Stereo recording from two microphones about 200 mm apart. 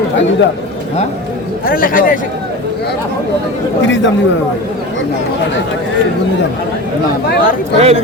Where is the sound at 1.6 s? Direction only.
45° left (ahead or behind).